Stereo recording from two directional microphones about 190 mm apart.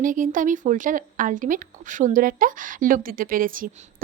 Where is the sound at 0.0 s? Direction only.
45° right (ahead or behind).